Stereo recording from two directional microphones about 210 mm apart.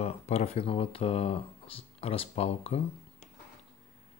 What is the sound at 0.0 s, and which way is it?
Speech, 30° left (ahead or behind).